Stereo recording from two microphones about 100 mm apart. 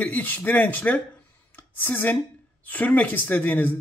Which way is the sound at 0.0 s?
15° left (ahead or behind).